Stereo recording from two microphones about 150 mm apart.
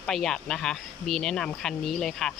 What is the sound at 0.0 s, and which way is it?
Speech, 5° left (ahead or behind).